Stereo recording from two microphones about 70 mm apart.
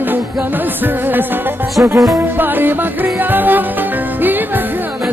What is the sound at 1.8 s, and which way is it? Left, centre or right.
Music, right.